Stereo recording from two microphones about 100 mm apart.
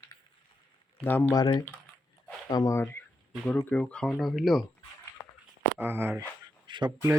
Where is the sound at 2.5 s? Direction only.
40° left (ahead or behind).